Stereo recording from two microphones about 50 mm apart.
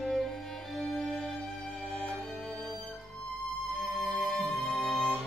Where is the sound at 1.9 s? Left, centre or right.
Centre.